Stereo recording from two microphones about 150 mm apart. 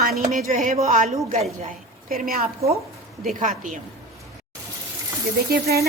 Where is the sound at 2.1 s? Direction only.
75° right (ahead or behind).